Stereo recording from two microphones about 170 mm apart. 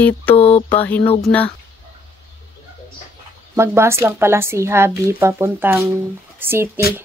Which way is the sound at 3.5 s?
15° right (ahead or behind).